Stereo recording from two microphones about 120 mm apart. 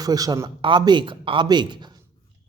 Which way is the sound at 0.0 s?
30° right (ahead or behind).